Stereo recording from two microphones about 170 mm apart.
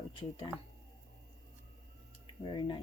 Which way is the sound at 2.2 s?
30° left (ahead or behind).